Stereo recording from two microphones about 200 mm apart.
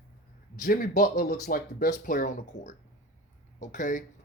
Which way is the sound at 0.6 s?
45° left (ahead or behind).